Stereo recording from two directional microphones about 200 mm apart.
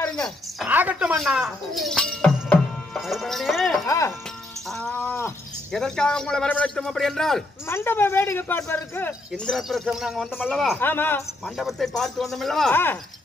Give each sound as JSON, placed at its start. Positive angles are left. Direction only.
{"t": 0.1, "sound": "a woman's voice", "side_deg": 0}
{"t": 0.7, "sound": "speech", "side_deg": -10}
{"t": 3.8, "sound": "speech", "side_deg": 15}
{"t": 4.6, "sound": "speech", "side_deg": 0}
{"t": 7.6, "sound": "speech", "side_deg": 10}
{"t": 11.5, "sound": "speech", "side_deg": 0}